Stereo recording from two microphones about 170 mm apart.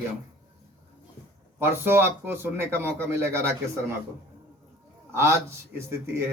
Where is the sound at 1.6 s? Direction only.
10° right (ahead or behind).